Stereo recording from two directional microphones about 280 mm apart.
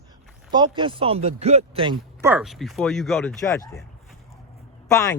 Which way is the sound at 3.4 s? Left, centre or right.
Centre.